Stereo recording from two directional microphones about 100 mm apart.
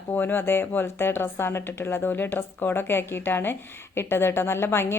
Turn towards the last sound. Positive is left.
turn(degrees=25)  # may be behind; listen again after turning